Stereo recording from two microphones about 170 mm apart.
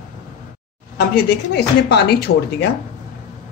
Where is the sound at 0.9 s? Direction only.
80° left.